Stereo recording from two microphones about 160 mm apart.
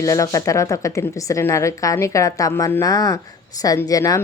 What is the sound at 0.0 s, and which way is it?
Speech, 20° left (ahead or behind).